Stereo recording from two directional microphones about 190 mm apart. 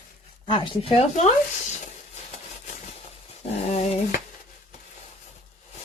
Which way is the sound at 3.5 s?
35° left (ahead or behind).